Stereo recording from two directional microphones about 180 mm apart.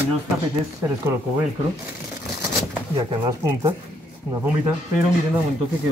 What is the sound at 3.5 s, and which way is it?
Speech, 15° right (ahead or behind).